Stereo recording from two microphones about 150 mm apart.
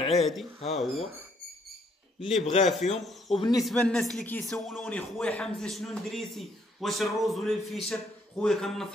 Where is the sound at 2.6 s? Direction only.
Centre (ahead or behind).